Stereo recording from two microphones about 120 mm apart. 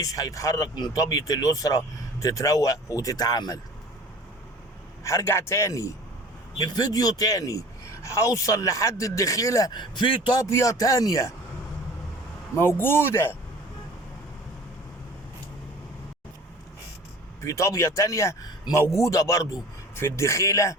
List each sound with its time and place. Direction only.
0.0 s speech: 30° left (ahead or behind)
5.0 s speech: 20° left (ahead or behind); by 10.4 s 40° left (ahead or behind)
10.5 s speech: 25° left (ahead or behind)
12.5 s speech: 20° left (ahead or behind)
17.4 s speech: 25° left (ahead or behind)